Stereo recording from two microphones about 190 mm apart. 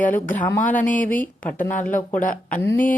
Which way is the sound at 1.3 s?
10° left (ahead or behind).